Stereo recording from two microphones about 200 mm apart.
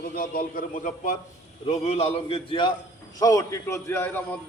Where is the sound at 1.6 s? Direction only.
30° left (ahead or behind); by 4.2 s 10° left (ahead or behind).